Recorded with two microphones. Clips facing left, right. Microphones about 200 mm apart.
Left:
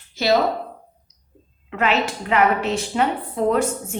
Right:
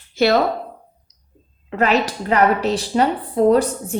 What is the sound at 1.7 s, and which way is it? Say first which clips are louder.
A woman's voice: right 3 dB; 40° right (ahead or behind).